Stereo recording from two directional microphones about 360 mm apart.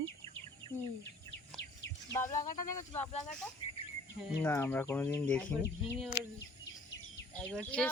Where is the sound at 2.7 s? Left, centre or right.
Centre.